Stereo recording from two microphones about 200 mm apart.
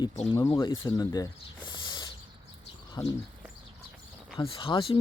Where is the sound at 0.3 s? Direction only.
15° left (ahead or behind).